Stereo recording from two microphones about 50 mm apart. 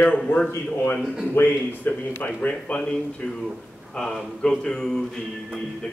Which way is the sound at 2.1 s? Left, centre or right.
Left.